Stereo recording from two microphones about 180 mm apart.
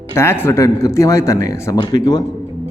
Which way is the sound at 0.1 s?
15° left (ahead or behind).